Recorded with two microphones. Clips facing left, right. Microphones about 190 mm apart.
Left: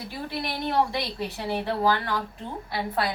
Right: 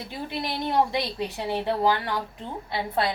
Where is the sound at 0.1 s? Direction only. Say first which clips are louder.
Right 1 dB; 20° right (ahead or behind).